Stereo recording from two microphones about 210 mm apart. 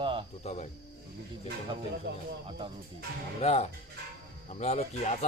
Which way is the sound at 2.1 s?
50° right (ahead or behind).